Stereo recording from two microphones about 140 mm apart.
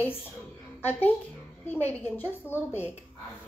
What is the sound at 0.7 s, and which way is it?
A child's voice, 15° left (ahead or behind).